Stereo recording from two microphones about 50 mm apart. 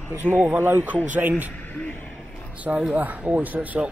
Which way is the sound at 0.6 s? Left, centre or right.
Right.